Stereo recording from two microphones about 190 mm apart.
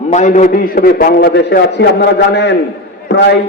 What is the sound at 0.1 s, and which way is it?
A man's voice, 40° left (ahead or behind).